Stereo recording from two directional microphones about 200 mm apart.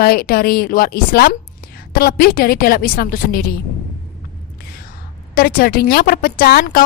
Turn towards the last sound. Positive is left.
turn(degrees=50)  # may be behind; listen again after turning